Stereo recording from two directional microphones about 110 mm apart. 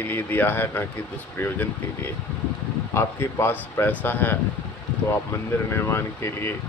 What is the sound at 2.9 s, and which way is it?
Speech, 25° left (ahead or behind).